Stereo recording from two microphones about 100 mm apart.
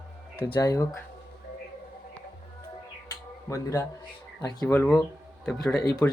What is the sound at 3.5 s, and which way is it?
Speech, 30° left (ahead or behind).